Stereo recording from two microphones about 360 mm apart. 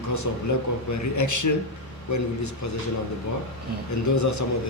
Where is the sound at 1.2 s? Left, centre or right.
Left.